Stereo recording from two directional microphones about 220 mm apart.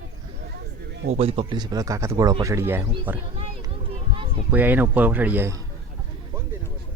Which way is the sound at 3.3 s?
25° right (ahead or behind).